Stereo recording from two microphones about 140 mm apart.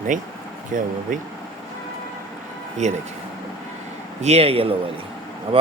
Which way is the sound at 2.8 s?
55° right (ahead or behind).